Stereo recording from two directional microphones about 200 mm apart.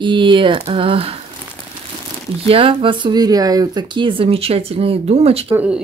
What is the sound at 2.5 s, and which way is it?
Speech, 25° right (ahead or behind).